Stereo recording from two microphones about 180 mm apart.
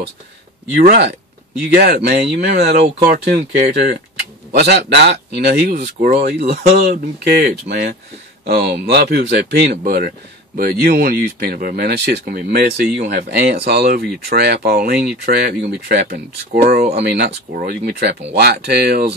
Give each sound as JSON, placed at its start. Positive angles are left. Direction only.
{"t": 0.7, "sound": "speech", "side_deg": -55}
{"t": 3.1, "sound": "speech", "side_deg": -40}
{"t": 3.7, "sound": "speech", "side_deg": -60}